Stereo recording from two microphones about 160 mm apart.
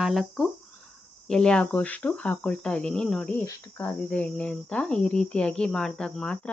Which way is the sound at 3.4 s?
15° left (ahead or behind).